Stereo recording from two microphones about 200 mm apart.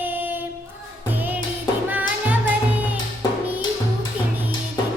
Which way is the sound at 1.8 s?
10° right (ahead or behind).